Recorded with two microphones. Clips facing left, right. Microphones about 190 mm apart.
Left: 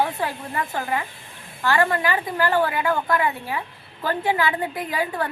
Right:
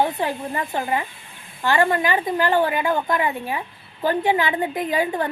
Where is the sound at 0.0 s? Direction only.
20° right (ahead or behind).